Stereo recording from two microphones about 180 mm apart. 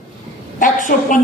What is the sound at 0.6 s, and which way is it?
Speech, 45° left (ahead or behind).